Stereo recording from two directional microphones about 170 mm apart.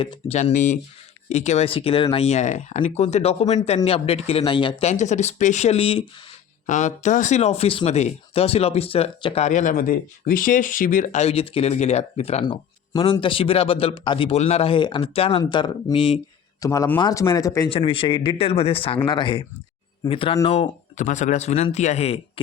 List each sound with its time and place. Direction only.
0.0 s speech: 30° left (ahead or behind)
0.3 s speech: 45° left (ahead or behind); by 4.9 s 30° left (ahead or behind)
4.9 s speech: 45° left (ahead or behind)
12.5 s speech: 25° left (ahead or behind)
16.6 s speech: 15° left (ahead or behind)
17.7 s speech: 35° left (ahead or behind)